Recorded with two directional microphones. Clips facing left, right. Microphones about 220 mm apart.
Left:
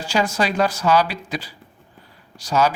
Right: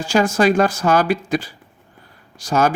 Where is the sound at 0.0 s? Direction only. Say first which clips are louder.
Right 6 dB; 50° right (ahead or behind).